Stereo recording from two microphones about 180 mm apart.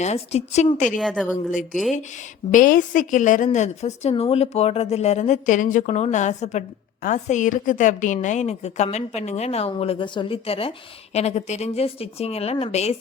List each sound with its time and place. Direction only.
0.0 s a woman's voice: 35° left (ahead or behind)
0.9 s a woman's voice: centre (ahead or behind)
1.5 s a woman's voice: 45° left (ahead or behind)